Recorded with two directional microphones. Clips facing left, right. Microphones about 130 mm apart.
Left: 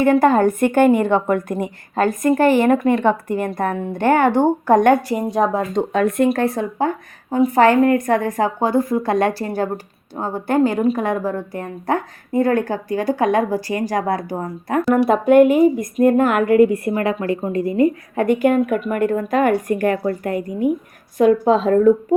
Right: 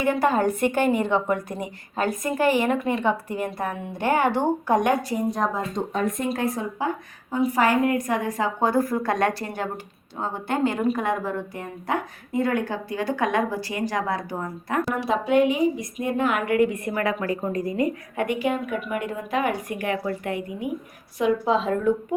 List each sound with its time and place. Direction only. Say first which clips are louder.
0.0 s a woman's voice: left 7 dB; 50° left (ahead or behind)
8.6 s speech: left 2 dB; 25° left (ahead or behind); by 14.8 s 40° left (ahead or behind)
14.9 s a woman's voice: left 10 dB; 55° left (ahead or behind)
16.6 s speech: left 7 dB; 35° left (ahead or behind)
18.3 s a woman's voice: left 11 dB; 50° left (ahead or behind)